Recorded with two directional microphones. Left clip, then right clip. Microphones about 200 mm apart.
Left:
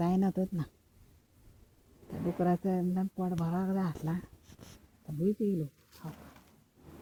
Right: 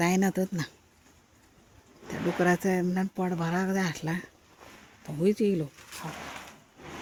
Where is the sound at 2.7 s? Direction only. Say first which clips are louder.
Right 5 dB; 40° right (ahead or behind).